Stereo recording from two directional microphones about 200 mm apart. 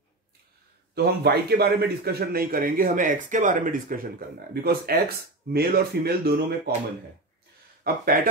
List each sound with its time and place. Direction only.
0.9 s a man's voice: 55° right (ahead or behind)
7.8 s a man's voice: 45° right (ahead or behind)